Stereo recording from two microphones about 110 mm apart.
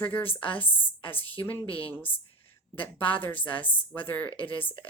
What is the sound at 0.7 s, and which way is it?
A woman's voice, 15° left (ahead or behind).